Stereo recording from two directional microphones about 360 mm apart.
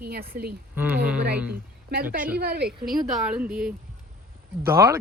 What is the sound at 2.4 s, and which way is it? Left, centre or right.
Speech, right.